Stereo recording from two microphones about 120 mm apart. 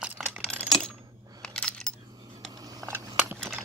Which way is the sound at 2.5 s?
30° right (ahead or behind).